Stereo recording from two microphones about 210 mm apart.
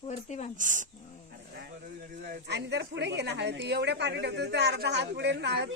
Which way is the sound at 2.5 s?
55° right (ahead or behind).